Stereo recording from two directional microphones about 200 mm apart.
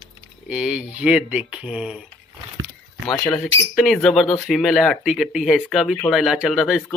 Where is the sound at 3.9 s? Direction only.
Centre (ahead or behind).